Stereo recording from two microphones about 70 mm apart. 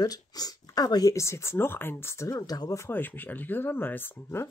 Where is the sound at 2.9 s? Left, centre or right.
Left.